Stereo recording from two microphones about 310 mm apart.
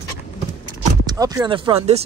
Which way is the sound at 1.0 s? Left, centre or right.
Centre.